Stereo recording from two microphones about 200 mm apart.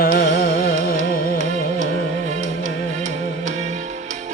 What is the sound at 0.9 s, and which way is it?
Music, 45° left (ahead or behind).